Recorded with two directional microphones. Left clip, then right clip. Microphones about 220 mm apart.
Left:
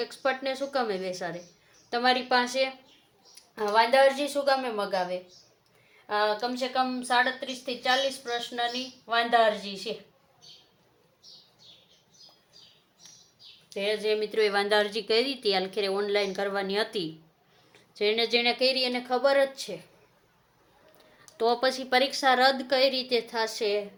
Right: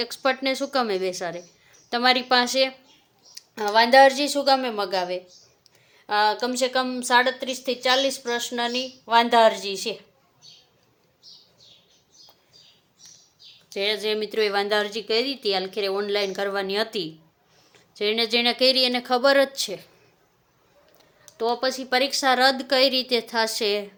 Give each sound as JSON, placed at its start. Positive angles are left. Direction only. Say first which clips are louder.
{"t": 0.0, "sound": "a woman's voice", "louder": "right 5 dB", "side_deg": -35}
{"t": 13.7, "sound": "speech", "louder": "right 3 dB", "side_deg": -35}
{"t": 21.2, "sound": "speech", "louder": "right 1 dB", "side_deg": -5}